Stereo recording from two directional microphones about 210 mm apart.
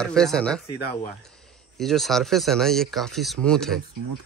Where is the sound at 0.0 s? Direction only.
5° left (ahead or behind).